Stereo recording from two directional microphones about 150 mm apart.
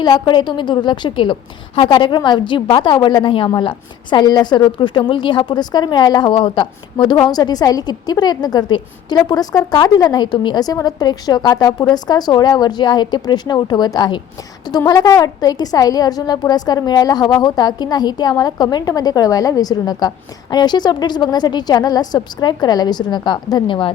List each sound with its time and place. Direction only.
0.0 s a woman's voice: 30° left (ahead or behind)